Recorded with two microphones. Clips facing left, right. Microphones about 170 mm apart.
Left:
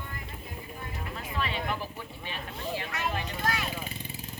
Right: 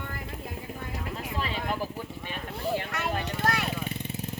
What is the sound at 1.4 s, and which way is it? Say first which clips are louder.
Speech: even; 40° right (ahead or behind).